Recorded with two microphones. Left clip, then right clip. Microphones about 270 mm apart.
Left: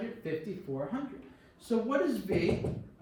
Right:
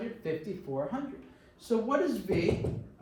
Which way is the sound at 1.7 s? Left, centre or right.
Centre.